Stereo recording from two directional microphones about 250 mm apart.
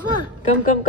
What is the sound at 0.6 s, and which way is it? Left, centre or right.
Speech, left.